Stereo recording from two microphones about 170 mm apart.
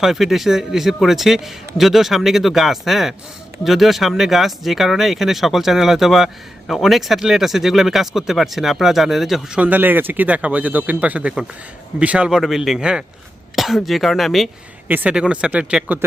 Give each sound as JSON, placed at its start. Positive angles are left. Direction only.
{"t": 0.0, "sound": "speech", "side_deg": 0}